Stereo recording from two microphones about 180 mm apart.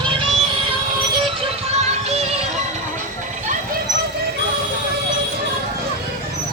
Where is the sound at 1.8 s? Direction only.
35° right (ahead or behind).